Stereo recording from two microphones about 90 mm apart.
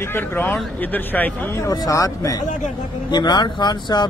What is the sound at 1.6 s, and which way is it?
Speech, 40° left (ahead or behind).